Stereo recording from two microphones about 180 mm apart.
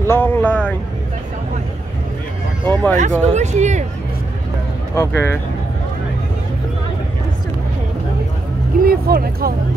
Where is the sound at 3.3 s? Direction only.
40° right (ahead or behind).